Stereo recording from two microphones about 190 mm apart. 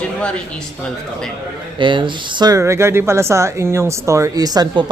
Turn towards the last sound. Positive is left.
turn(degrees=-20)  # may be behind; listen again after turning